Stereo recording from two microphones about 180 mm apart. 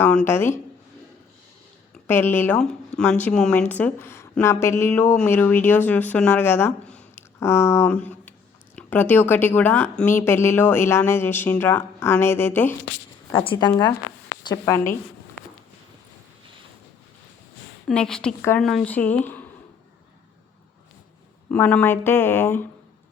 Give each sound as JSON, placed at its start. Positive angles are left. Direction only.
{"t": 0.0, "sound": "a woman's voice", "side_deg": 10}
{"t": 2.0, "sound": "a woman's voice", "side_deg": 10}
{"t": 13.3, "sound": "a woman's voice", "side_deg": 25}
{"t": 17.8, "sound": "a woman's voice", "side_deg": 5}
{"t": 21.5, "sound": "a woman's voice", "side_deg": 10}